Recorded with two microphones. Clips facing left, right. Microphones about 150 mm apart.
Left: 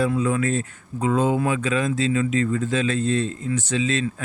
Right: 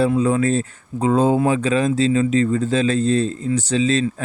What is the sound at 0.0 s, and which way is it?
Speech, 30° right (ahead or behind).